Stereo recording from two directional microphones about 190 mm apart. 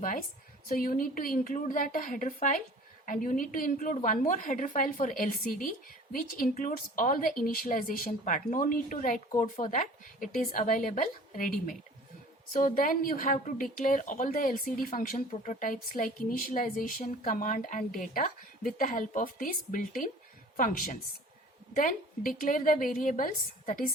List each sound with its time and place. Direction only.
0.8 s speech: 45° left (ahead or behind)